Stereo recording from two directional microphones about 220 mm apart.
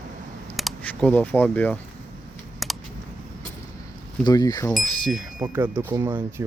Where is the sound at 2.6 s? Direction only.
Centre (ahead or behind).